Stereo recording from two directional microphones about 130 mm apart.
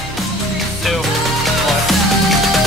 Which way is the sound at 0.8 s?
Centre (ahead or behind).